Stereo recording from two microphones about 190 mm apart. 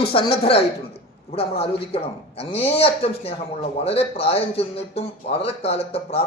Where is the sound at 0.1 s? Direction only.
30° left (ahead or behind).